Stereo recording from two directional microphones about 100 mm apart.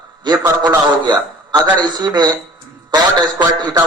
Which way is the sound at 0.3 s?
45° right (ahead or behind).